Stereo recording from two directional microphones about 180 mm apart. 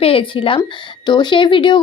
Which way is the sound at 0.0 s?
30° left (ahead or behind).